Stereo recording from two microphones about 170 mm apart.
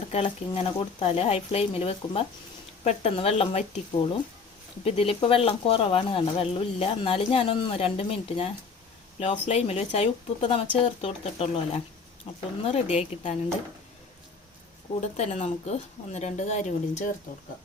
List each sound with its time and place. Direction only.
0.1 s speech: 35° left (ahead or behind)
15.0 s speech: 40° left (ahead or behind)